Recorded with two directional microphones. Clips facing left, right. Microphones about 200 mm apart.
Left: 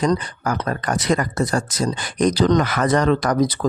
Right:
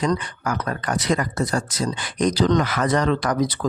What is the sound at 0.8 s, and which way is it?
Speech, 45° left (ahead or behind).